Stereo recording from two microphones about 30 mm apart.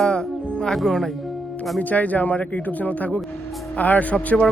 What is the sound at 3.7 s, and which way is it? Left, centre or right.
Speech, left.